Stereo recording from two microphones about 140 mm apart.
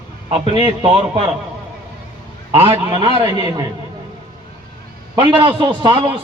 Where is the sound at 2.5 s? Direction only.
40° right (ahead or behind).